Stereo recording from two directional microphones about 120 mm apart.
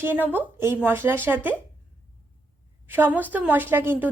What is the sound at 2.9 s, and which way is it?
A woman's voice, 15° right (ahead or behind).